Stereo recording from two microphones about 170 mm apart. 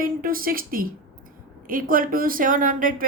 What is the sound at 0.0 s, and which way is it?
A woman's voice, 55° right (ahead or behind).